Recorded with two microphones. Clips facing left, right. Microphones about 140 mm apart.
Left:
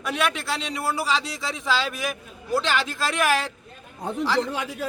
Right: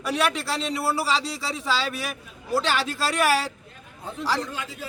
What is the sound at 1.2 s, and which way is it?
Speech, 30° right (ahead or behind).